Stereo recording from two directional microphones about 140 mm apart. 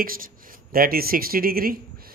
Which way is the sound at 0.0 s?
90° right.